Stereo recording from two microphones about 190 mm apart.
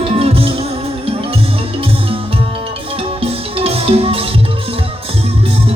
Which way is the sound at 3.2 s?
30° right (ahead or behind).